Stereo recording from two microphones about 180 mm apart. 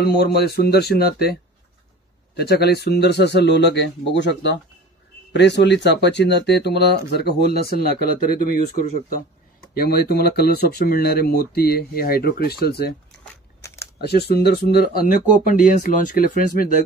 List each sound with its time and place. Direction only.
0.0 s speech: 65° left (ahead or behind)
2.3 s speech: 65° left (ahead or behind)
8.5 s speech: 40° left (ahead or behind)
9.8 s speech: 60° left (ahead or behind)
13.6 s crumpling: 15° left (ahead or behind)
14.0 s speech: 60° left (ahead or behind)